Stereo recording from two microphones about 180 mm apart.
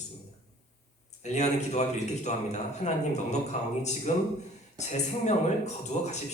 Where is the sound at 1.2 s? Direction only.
40° left (ahead or behind).